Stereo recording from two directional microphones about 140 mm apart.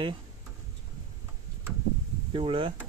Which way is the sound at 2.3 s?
35° right (ahead or behind).